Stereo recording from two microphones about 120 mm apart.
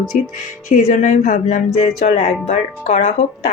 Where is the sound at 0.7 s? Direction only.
90° left.